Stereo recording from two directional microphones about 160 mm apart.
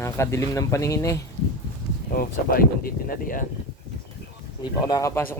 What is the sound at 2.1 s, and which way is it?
Speech, 65° left (ahead or behind).